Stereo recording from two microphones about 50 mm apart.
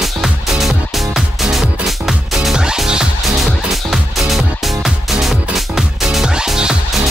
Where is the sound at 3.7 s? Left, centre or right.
Centre.